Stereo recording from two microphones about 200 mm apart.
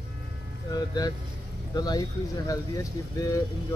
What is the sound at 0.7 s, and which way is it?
Speech, 20° left (ahead or behind).